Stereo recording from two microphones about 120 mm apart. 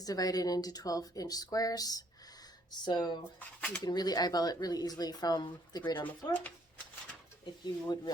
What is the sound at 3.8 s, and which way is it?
A woman's voice, 35° left (ahead or behind).